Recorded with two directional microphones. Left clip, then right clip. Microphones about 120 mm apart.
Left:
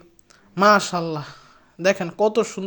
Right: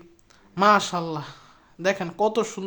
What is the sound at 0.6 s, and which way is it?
Speech, 30° left (ahead or behind).